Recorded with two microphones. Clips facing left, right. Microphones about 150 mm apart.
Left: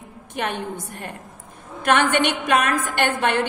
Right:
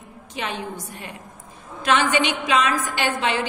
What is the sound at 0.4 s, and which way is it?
Speech, 55° left (ahead or behind).